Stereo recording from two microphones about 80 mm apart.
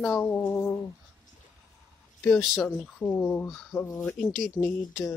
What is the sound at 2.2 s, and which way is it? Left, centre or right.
Speech, centre.